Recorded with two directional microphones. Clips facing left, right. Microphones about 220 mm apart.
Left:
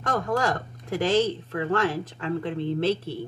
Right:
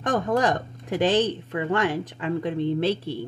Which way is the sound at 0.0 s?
20° right (ahead or behind).